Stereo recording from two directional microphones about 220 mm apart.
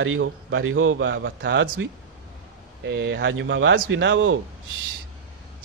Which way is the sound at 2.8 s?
50° right (ahead or behind).